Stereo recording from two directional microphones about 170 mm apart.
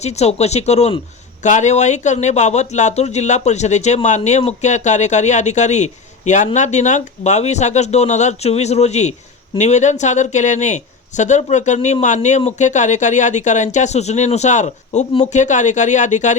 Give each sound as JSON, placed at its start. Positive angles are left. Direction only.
{"t": 0.0, "sound": "speech", "side_deg": 40}